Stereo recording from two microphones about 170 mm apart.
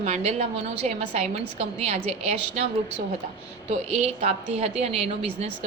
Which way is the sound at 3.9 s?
40° right (ahead or behind).